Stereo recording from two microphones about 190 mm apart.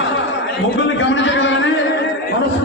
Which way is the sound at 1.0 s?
70° left (ahead or behind).